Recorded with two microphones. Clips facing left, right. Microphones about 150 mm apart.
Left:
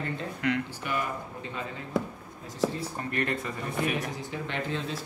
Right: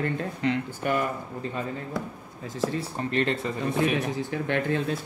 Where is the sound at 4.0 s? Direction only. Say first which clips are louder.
Right 5 dB; 60° right (ahead or behind).